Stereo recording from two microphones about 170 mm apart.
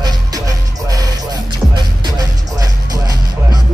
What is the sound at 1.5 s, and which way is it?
Music, 25° right (ahead or behind).